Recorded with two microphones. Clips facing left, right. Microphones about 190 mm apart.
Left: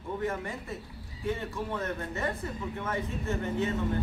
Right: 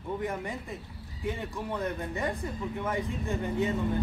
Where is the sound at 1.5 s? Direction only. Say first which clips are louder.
Right 1 dB; 15° right (ahead or behind).